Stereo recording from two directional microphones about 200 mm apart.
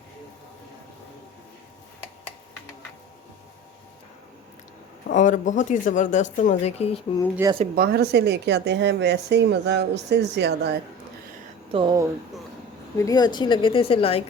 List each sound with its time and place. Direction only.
5.0 s speech: 40° left (ahead or behind)
7.4 s speech: 15° right (ahead or behind)
7.8 s speech: 55° right (ahead or behind)
11.7 s speech: 25° right (ahead or behind)
13.0 s a woman's voice: 20° left (ahead or behind)